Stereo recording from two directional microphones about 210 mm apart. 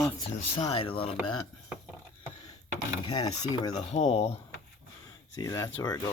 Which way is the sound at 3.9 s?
30° left (ahead or behind).